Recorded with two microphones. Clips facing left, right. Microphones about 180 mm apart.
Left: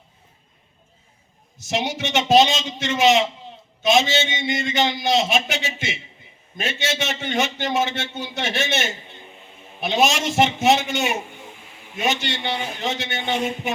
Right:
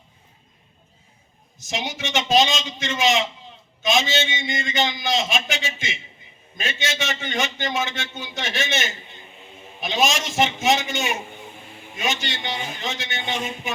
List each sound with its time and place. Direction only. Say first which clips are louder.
1.5 s a man's voice: left 5 dB; 60° left (ahead or behind)
9.8 s a man's voice: left 3 dB; 65° left (ahead or behind)